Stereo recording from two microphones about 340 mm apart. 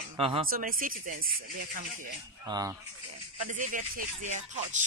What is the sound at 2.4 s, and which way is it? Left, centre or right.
Speech, centre.